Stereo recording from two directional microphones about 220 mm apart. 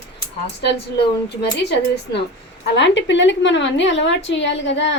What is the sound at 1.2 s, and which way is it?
A woman's voice, 50° left (ahead or behind).